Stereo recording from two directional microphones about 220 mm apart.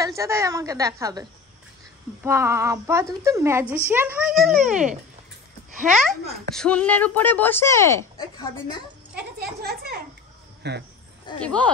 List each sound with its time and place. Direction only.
0.0 s speech: 15° right (ahead or behind)
2.2 s speech: 10° right (ahead or behind); by 8.8 s 20° left (ahead or behind)
9.4 s speech: 45° right (ahead or behind)
11.3 s speech: 5° left (ahead or behind)